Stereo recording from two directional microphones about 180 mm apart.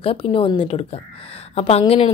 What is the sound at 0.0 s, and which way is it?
A woman's voice, 30° left (ahead or behind).